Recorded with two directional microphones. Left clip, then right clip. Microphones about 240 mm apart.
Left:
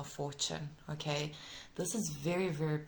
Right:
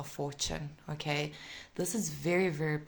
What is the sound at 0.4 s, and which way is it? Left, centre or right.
A woman's voice, right.